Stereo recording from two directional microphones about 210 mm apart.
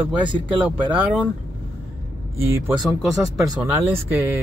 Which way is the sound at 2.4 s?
10° right (ahead or behind).